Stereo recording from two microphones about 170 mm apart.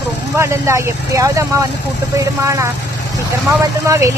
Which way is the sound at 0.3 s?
15° right (ahead or behind).